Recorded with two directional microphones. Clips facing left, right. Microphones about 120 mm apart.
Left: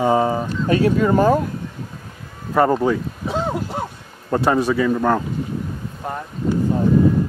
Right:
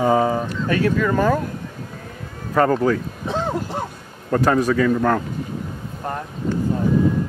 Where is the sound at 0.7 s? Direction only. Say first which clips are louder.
Left 3 dB; 25° left (ahead or behind).